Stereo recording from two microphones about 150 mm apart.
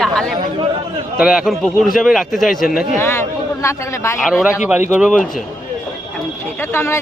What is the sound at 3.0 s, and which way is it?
A man's voice, 20° left (ahead or behind).